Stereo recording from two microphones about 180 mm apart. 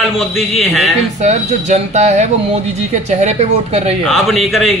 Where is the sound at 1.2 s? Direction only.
40° right (ahead or behind).